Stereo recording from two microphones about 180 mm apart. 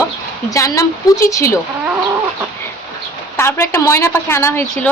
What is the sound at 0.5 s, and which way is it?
A child's voice, 15° left (ahead or behind).